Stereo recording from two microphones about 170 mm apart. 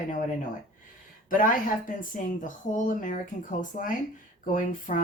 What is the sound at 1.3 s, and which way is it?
Speech, 55° left (ahead or behind).